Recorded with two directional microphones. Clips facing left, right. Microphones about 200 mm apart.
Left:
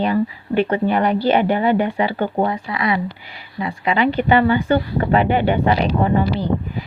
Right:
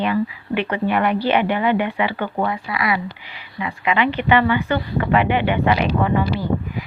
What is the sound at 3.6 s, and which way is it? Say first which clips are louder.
A woman's voice: left 2 dB; 40° left (ahead or behind).